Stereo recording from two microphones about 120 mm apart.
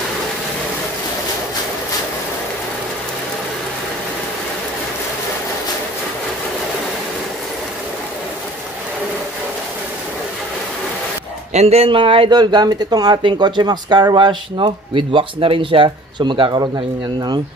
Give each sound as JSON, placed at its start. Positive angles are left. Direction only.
{"t": 11.5, "sound": "speech", "side_deg": -60}